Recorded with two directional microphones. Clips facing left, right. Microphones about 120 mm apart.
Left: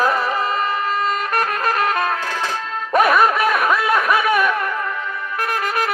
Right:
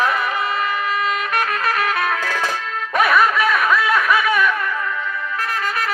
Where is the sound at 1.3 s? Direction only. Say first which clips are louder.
Left 1 dB; 40° left (ahead or behind).